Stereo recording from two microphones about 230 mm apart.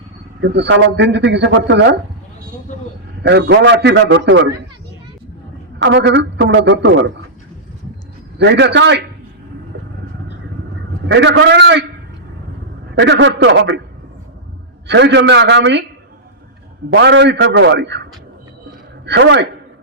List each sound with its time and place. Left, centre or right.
0.4 s speech: right
3.2 s speech: right
5.8 s speech: right
8.4 s speech: right
11.1 s speech: right
13.0 s speech: right
14.8 s speech: right
16.9 s speech: right
19.0 s a man's voice: right